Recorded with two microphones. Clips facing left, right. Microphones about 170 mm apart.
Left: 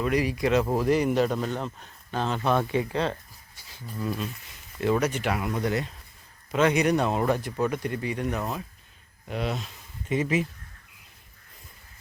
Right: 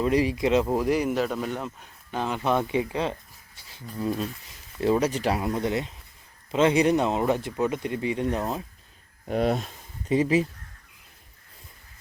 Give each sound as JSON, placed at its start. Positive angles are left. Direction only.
{"t": 0.0, "sound": "speech", "side_deg": -25}
{"t": 9.3, "sound": "speech", "side_deg": -50}
{"t": 10.1, "sound": "speech", "side_deg": -30}